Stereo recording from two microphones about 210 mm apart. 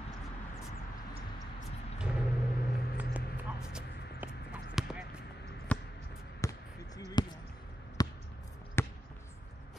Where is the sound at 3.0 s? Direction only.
5° right (ahead or behind).